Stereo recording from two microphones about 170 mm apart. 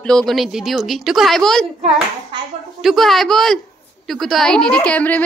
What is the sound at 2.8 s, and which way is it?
Speech, centre (ahead or behind).